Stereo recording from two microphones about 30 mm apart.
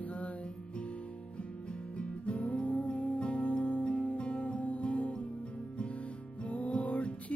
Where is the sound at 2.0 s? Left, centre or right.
Left.